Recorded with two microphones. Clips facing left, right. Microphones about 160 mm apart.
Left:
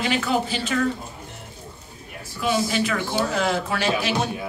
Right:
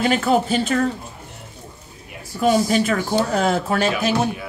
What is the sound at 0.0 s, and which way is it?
Speech, 45° right (ahead or behind).